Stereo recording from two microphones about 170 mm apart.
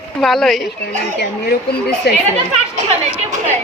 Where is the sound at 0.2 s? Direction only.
Centre (ahead or behind).